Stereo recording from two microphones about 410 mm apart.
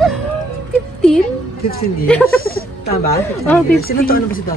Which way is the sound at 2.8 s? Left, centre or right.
Left.